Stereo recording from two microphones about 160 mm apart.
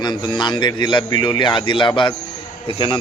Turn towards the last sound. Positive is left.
turn(degrees=30)  # may be behind; listen again after turning